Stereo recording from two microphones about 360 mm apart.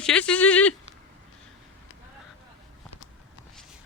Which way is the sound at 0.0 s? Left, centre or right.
Centre.